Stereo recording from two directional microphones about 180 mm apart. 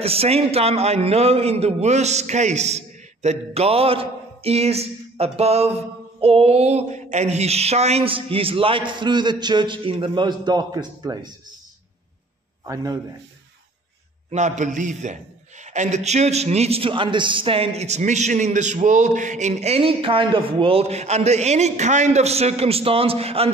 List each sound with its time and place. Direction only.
0.0 s a man's voice: 35° right (ahead or behind)
12.6 s a man's voice: 20° right (ahead or behind)
14.3 s a man's voice: 40° right (ahead or behind)